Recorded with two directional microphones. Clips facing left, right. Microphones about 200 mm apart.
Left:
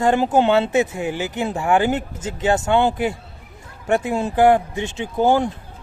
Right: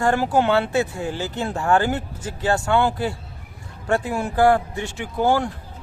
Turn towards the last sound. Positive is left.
turn(degrees=20)  # may be behind; listen again after turning